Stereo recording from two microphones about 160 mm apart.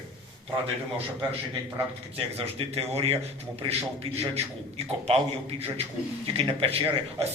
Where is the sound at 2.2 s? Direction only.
40° right (ahead or behind).